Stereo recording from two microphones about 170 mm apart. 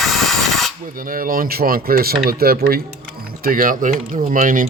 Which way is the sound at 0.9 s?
55° right (ahead or behind).